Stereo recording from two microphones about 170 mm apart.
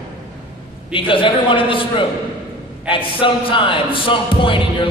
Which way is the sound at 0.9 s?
30° left (ahead or behind).